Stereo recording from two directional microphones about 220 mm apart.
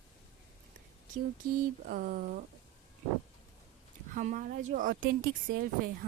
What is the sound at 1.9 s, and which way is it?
Speech, 40° right (ahead or behind).